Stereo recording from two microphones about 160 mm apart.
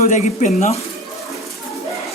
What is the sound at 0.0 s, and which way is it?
Speech, 50° left (ahead or behind).